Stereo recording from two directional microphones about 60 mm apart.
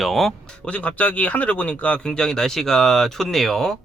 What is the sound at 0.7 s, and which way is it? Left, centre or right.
Speech, left.